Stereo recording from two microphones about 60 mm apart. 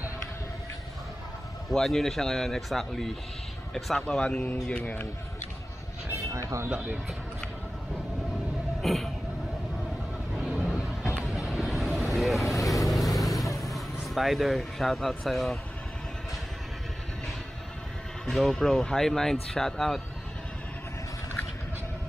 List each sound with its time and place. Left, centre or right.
1.7 s speech: centre
4.1 s speech: centre
6.7 s speech: right
8.8 s vehicle: centre
10.4 s a sound: centre
11.2 s vehicle: centre
13.6 s speech: centre
18.2 s speech: centre